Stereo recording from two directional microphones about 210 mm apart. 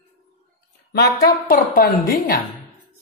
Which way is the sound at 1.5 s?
40° left (ahead or behind).